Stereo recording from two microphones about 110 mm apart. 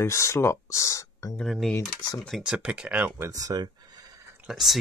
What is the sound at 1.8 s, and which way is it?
Speech, 35° left (ahead or behind).